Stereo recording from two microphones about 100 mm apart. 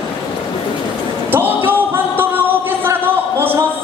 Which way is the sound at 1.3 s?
20° right (ahead or behind).